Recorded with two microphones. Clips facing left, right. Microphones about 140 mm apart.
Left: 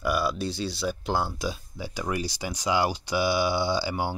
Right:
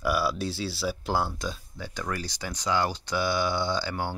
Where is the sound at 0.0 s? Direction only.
5° right (ahead or behind).